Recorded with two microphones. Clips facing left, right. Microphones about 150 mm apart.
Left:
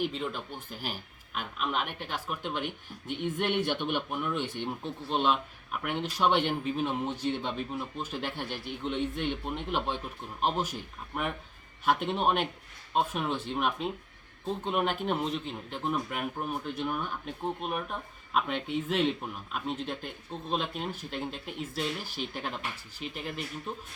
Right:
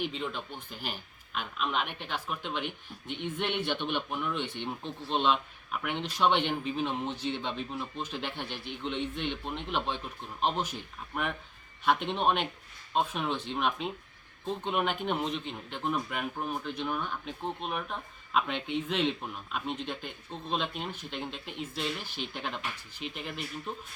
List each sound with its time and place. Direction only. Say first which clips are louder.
0.0 s speech: left 2 dB; 5° left (ahead or behind)
3.2 s a man's voice: left 3 dB; 45° left (ahead or behind)
3.7 s speech: left 1 dB; 10° left (ahead or behind)
9.0 s a man's voice: left 3 dB; 45° left (ahead or behind)
9.4 s speech: left 1 dB; 10° left (ahead or behind)
23.0 s a man's voice: even; 45° left (ahead or behind)